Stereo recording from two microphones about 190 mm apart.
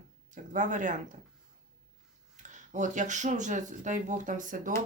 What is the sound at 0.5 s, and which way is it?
Speech, 40° right (ahead or behind).